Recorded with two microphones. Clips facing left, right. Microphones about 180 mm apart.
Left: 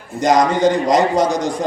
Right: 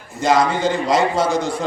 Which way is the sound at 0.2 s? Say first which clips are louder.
Left 3 dB; 15° left (ahead or behind).